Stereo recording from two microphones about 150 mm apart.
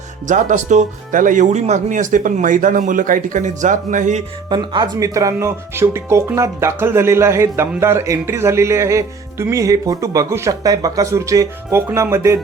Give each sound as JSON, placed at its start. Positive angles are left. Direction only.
{"t": 0.3, "sound": "speech", "side_deg": -55}
{"t": 4.4, "sound": "speech", "side_deg": -30}